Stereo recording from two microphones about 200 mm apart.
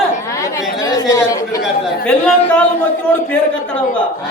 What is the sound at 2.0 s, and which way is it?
A man's voice, 5° left (ahead or behind).